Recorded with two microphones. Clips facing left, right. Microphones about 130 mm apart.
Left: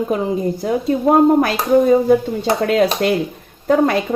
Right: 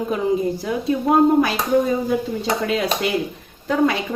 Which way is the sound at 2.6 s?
55° left (ahead or behind).